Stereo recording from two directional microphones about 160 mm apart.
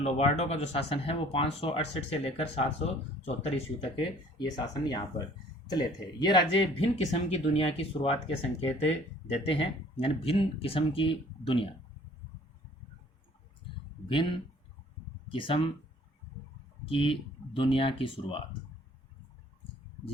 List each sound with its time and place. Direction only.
0.0 s speech: 40° left (ahead or behind)
14.1 s speech: 30° left (ahead or behind)
16.9 s speech: 35° left (ahead or behind)